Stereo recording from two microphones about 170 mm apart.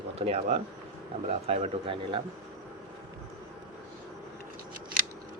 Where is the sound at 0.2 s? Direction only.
35° right (ahead or behind).